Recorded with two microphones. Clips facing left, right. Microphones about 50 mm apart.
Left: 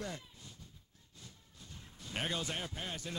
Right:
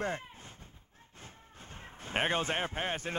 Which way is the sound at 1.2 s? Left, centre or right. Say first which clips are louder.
Right 6 dB; right.